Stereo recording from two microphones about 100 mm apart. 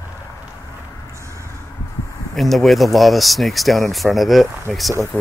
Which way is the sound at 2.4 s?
Centre (ahead or behind).